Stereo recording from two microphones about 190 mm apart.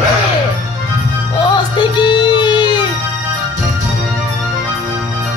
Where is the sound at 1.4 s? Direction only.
25° left (ahead or behind).